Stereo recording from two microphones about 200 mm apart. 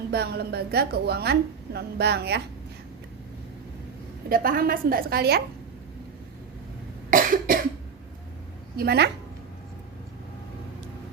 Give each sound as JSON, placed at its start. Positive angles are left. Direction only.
{"t": 0.1, "sound": "a woman's voice", "side_deg": -55}
{"t": 4.3, "sound": "a woman's voice", "side_deg": -45}
{"t": 7.1, "sound": "cough", "side_deg": -45}
{"t": 8.7, "sound": "a woman's voice", "side_deg": -50}